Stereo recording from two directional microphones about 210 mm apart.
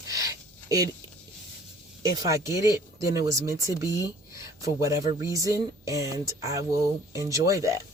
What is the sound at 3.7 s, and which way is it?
Speech, 15° left (ahead or behind).